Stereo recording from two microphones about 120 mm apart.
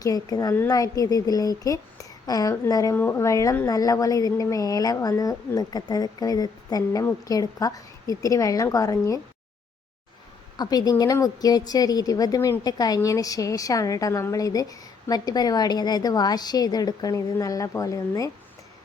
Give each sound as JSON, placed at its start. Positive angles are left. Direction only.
{"t": 0.0, "sound": "a woman's voice", "side_deg": 30}
{"t": 2.9, "sound": "speech", "side_deg": 20}
{"t": 10.6, "sound": "a woman's voice", "side_deg": 30}